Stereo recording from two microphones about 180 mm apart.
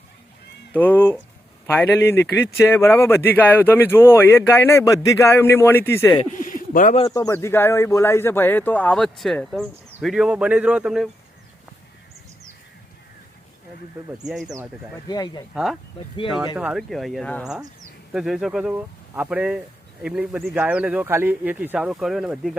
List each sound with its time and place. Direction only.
0.7 s speech: 10° left (ahead or behind)
6.4 s a sound: 50° left (ahead or behind)
7.0 s speech: 20° left (ahead or behind); by 11.1 s 5° right (ahead or behind)
14.3 s speech: centre (ahead or behind)
15.0 s speech: 25° left (ahead or behind)
16.6 s speech: 5° right (ahead or behind)